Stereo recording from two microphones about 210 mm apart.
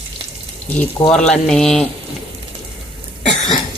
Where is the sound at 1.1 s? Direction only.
5° left (ahead or behind).